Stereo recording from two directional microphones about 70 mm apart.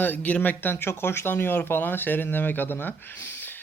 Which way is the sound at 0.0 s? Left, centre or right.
Left.